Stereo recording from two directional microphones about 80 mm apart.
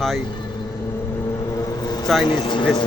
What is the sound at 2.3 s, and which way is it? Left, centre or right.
Speech, left.